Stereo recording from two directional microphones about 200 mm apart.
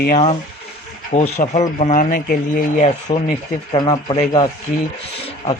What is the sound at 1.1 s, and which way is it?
Speech, 35° left (ahead or behind).